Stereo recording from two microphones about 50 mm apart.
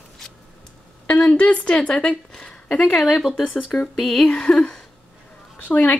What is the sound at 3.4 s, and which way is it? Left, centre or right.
Speech, left.